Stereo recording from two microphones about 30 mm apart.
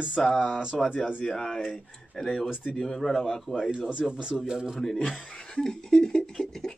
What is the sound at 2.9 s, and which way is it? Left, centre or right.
Speech, centre.